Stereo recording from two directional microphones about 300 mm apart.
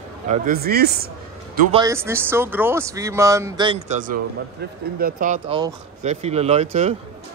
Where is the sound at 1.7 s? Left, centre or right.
Centre.